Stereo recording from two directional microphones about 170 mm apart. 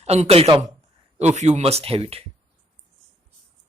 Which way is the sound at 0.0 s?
40° right (ahead or behind).